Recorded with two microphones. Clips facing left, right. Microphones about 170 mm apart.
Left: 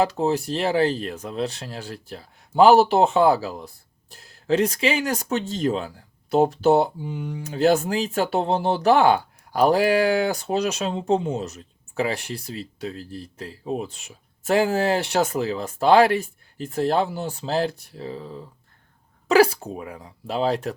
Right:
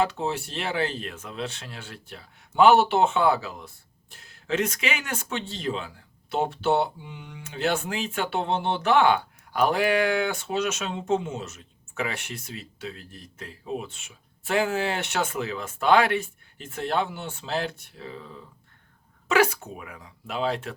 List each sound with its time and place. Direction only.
0.0 s speech: 40° left (ahead or behind)